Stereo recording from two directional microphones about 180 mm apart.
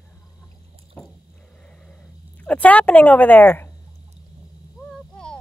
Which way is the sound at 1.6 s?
5° left (ahead or behind).